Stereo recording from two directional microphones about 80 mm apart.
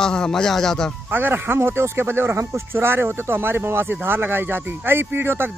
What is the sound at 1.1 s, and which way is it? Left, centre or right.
Speech, right.